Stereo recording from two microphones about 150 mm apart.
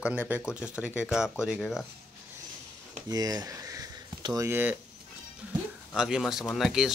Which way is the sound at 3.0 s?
25° right (ahead or behind).